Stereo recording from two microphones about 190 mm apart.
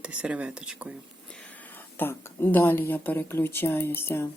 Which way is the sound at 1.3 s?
5° left (ahead or behind).